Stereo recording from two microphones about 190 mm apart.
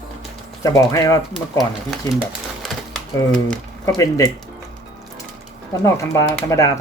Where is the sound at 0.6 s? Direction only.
15° left (ahead or behind).